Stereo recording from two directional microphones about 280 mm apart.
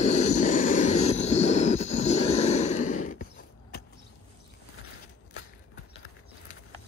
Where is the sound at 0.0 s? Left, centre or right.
Left.